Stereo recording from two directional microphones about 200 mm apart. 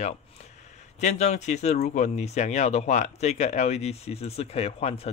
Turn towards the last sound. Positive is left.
turn(degrees=30)  # may be behind; listen again after turning